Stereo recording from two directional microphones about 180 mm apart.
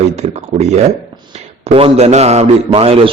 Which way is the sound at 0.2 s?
40° right (ahead or behind).